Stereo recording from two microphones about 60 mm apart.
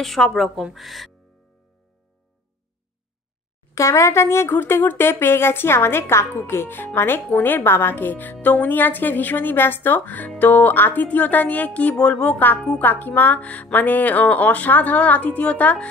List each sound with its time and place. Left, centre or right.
0.0 s speech: centre
3.7 s a woman's voice: left